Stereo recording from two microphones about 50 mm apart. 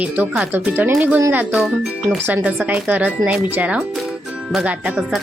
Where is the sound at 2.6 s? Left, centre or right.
Right.